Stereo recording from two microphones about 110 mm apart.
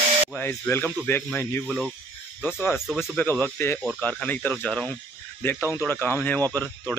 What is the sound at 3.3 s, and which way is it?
Speech, 20° left (ahead or behind).